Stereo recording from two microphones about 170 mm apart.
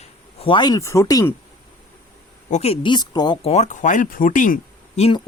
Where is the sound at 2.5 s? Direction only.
35° left (ahead or behind).